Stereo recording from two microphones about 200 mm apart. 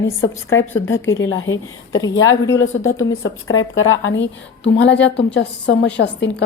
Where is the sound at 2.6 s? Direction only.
75° left (ahead or behind).